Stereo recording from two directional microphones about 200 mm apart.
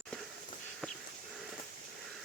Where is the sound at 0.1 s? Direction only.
5° left (ahead or behind).